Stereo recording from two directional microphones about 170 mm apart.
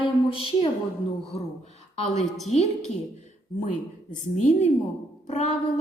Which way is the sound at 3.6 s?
45° left (ahead or behind).